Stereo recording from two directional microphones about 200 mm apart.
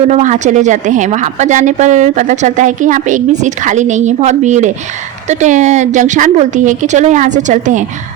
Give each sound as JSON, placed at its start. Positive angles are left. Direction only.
{"t": 0.1, "sound": "a woman's voice", "side_deg": -35}